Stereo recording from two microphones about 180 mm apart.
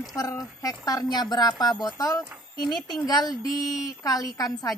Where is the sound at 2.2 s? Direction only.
Centre (ahead or behind).